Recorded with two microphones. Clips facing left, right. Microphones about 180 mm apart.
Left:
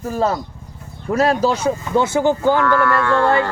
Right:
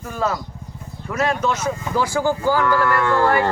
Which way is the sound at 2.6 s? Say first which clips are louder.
Left 2 dB; 20° right (ahead or behind).